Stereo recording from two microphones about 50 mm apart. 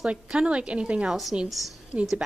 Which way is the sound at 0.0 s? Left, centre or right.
Centre.